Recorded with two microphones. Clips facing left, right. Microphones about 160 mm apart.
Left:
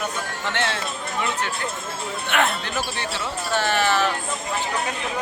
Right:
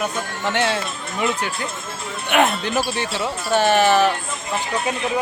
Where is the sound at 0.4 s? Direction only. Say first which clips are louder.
Right 5 dB; 15° right (ahead or behind).